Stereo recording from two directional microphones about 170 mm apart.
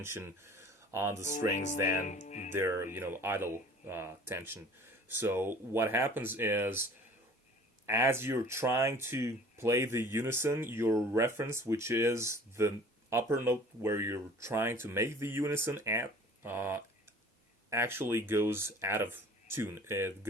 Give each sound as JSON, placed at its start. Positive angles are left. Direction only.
{"t": 0.0, "sound": "speech", "side_deg": -15}
{"t": 1.2, "sound": "speech", "side_deg": 45}
{"t": 2.5, "sound": "speech", "side_deg": -15}
{"t": 7.9, "sound": "speech", "side_deg": -15}